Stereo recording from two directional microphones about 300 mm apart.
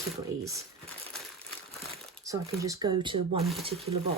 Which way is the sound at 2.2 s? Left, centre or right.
Centre.